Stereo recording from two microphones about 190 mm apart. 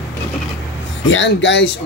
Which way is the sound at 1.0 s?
80° left.